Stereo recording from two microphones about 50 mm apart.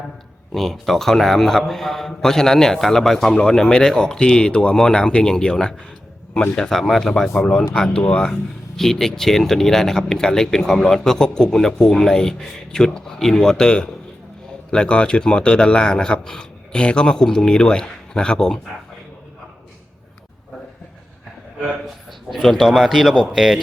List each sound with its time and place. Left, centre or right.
0.5 s a man's voice: centre
21.8 s a man's voice: centre